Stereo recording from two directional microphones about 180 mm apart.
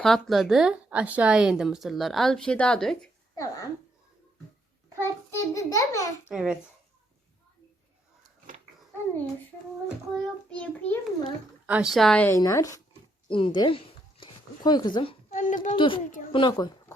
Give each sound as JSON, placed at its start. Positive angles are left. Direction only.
{"t": 0.0, "sound": "a woman's voice", "side_deg": 0}
{"t": 3.3, "sound": "speech", "side_deg": 20}
{"t": 4.9, "sound": "a child's voice", "side_deg": 15}
{"t": 6.3, "sound": "a woman's voice", "side_deg": -5}
{"t": 10.5, "sound": "a child's voice", "side_deg": 10}
{"t": 11.6, "sound": "a woman's voice", "side_deg": -5}
{"t": 15.3, "sound": "speech", "side_deg": 45}
{"t": 15.7, "sound": "speech", "side_deg": 30}